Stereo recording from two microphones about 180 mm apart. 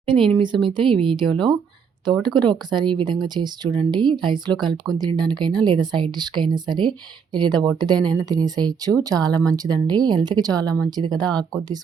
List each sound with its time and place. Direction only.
0.0 s speech: 30° right (ahead or behind)